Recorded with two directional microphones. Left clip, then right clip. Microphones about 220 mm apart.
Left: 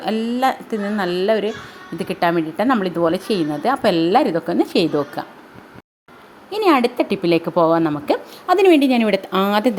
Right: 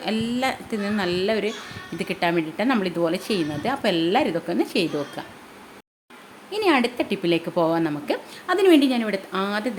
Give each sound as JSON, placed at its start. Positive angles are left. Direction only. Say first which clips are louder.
{"t": 0.0, "sound": "a woman's voice", "louder": "left 6 dB", "side_deg": 15}
{"t": 6.5, "sound": "a woman's voice", "louder": "left 5 dB", "side_deg": 20}